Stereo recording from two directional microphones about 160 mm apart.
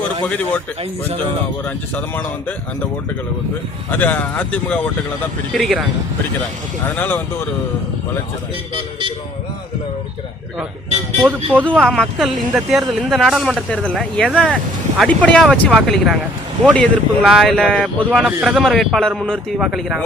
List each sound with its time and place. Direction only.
0.3 s speech: 10° left (ahead or behind)
1.6 s speech: 10° left (ahead or behind)
3.9 s speech: 10° left (ahead or behind)
6.8 s speech: 10° left (ahead or behind)
8.7 s speech: 30° right (ahead or behind)
11.2 s speech: 10° right (ahead or behind)
11.6 s speech: 5° left (ahead or behind)